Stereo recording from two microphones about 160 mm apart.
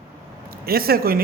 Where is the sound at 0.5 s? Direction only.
70° right (ahead or behind).